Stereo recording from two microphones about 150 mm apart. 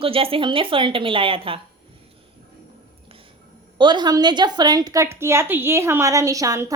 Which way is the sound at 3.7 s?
30° right (ahead or behind).